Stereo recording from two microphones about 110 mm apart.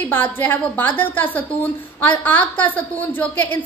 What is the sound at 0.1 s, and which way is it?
A woman's voice, 15° left (ahead or behind).